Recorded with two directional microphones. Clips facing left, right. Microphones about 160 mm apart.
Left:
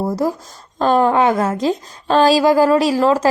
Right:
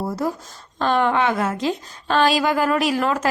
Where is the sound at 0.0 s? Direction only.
40° left (ahead or behind).